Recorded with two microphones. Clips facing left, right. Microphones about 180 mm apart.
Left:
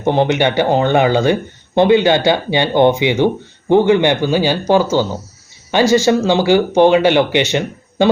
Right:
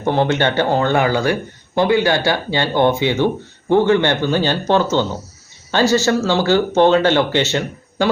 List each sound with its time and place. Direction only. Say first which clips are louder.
0.0 s speech: left 3 dB; 15° left (ahead or behind)